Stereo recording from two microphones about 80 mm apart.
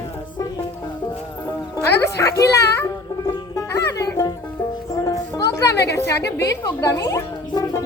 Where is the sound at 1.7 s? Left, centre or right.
Left.